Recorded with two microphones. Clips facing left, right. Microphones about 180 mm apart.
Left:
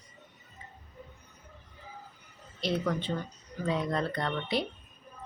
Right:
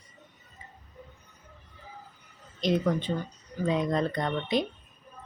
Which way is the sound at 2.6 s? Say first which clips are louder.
Right 4 dB; 15° right (ahead or behind).